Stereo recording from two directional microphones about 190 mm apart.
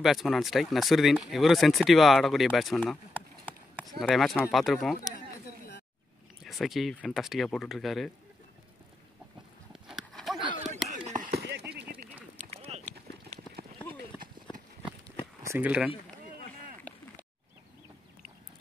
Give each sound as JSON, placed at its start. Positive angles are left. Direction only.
{"t": 0.0, "sound": "speech", "side_deg": 0}
{"t": 6.4, "sound": "speech", "side_deg": 0}
{"t": 9.7, "sound": "horse", "side_deg": 0}
{"t": 10.9, "sound": "chop", "side_deg": -40}
{"t": 11.3, "sound": "a sound", "side_deg": -60}
{"t": 12.4, "sound": "a sound", "side_deg": -35}
{"t": 15.4, "sound": "speech", "side_deg": -10}